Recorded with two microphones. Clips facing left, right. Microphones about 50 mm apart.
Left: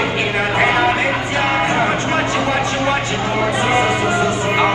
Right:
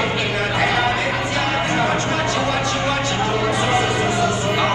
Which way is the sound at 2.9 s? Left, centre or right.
Left.